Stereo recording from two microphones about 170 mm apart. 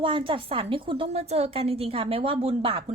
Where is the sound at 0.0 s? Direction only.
30° right (ahead or behind).